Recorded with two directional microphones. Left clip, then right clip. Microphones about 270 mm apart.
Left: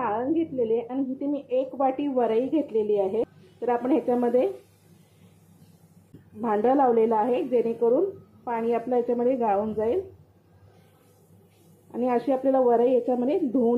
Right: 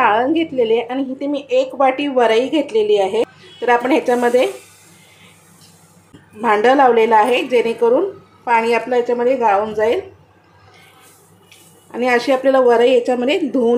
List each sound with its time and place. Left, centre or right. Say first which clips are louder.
0.0 s a woman's voice: right 12 dB; centre
6.4 s a woman's voice: right 10 dB; centre
11.9 s a woman's voice: right 9 dB; centre
13.5 s a woman's voice: right 8 dB; right